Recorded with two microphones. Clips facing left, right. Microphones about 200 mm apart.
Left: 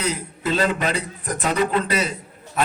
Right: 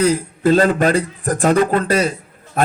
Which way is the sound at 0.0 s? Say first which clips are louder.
Right 10 dB; 45° right (ahead or behind).